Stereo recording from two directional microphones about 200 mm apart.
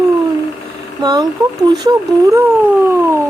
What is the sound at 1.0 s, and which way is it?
Speech, 20° right (ahead or behind).